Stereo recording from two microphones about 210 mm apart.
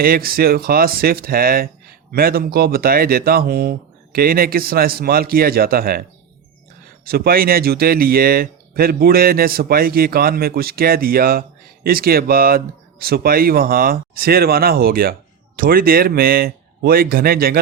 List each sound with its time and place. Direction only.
0.0 s speech: 45° right (ahead or behind)
7.0 s speech: 45° right (ahead or behind)